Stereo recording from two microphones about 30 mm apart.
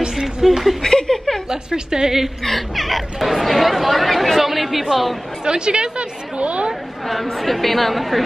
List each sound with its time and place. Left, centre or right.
0.5 s speech: centre
0.8 s chuckle: left
1.5 s a woman's voice: right
2.4 s speech: centre
5.4 s speech: right
6.3 s a woman's voice: right
7.3 s speech: centre